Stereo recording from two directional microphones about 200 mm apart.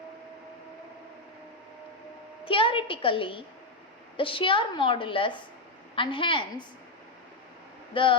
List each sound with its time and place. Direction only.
2.4 s a woman's voice: 25° left (ahead or behind)
7.9 s a woman's voice: 25° left (ahead or behind)